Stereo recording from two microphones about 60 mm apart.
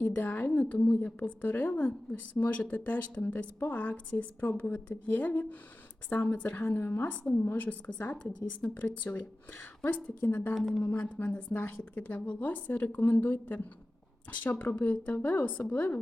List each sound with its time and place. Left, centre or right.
0.0 s a woman's voice: left
6.7 s a woman's voice: left
8.1 s a woman's voice: centre
8.8 s a woman's voice: left
10.2 s a woman's voice: left
10.5 s a woman's voice: centre
11.0 s a woman's voice: left